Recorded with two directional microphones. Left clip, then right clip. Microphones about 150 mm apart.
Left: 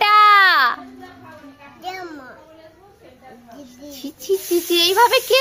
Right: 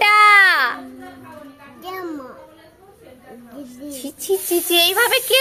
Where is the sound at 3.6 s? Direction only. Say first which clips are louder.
Right 2 dB; 20° left (ahead or behind).